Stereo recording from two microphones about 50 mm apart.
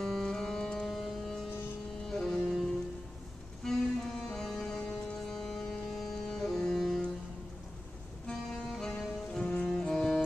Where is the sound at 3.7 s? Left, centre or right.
Centre.